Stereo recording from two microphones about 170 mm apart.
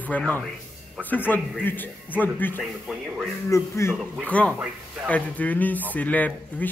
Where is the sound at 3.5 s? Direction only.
15° left (ahead or behind).